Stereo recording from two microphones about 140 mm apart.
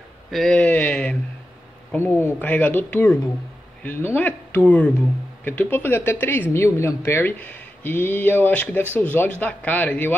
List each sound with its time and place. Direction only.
0.3 s speech: centre (ahead or behind)